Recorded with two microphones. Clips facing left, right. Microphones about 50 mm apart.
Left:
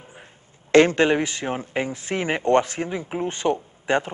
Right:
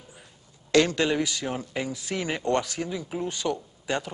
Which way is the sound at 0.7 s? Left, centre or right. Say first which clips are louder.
Left 6 dB; left.